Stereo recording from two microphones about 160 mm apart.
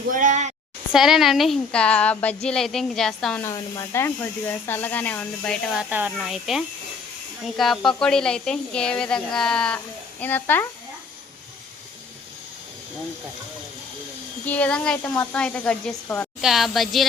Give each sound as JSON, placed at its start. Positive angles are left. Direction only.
{"t": 0.1, "sound": "a sound", "side_deg": -55}
{"t": 0.9, "sound": "speech", "side_deg": 0}
{"t": 3.4, "sound": "speech", "side_deg": 20}
{"t": 14.4, "sound": "speech", "side_deg": 10}
{"t": 16.4, "sound": "speech", "side_deg": 0}